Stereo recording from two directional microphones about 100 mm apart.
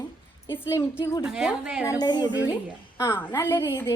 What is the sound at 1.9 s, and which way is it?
Speech, 45° left (ahead or behind).